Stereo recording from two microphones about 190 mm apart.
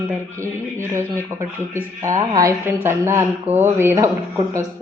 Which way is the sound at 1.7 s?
15° right (ahead or behind).